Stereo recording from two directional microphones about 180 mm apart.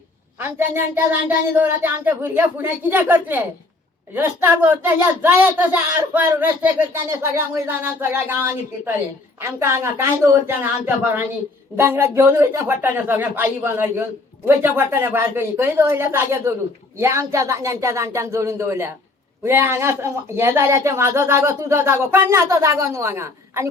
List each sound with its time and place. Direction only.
0.3 s speech: 10° right (ahead or behind)